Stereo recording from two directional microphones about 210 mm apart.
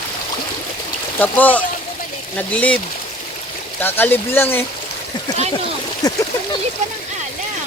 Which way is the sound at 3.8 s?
10° left (ahead or behind).